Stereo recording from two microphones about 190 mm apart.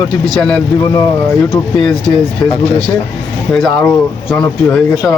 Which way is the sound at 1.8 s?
5° left (ahead or behind).